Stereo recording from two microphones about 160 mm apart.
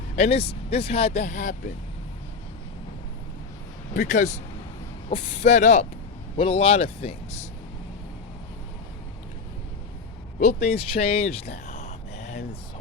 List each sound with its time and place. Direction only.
0.2 s speech: 40° left (ahead or behind)
3.9 s speech: 50° left (ahead or behind)
6.3 s speech: 35° left (ahead or behind)
10.4 s speech: 40° left (ahead or behind)
11.5 s a sound: 45° left (ahead or behind)